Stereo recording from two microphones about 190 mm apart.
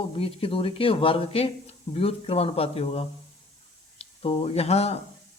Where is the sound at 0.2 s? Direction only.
30° left (ahead or behind).